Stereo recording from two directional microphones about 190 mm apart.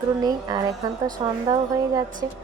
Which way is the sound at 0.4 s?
20° right (ahead or behind).